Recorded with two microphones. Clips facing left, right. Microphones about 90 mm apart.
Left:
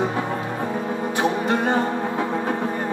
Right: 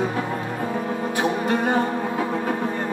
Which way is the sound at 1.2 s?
25° left (ahead or behind).